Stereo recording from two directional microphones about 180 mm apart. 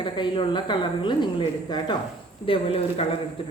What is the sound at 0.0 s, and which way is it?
Speech, 25° left (ahead or behind).